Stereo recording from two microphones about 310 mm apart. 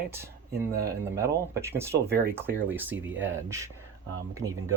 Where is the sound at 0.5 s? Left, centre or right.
Right.